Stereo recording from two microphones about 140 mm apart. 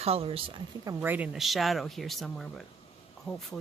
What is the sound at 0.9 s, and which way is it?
Speech, 15° right (ahead or behind).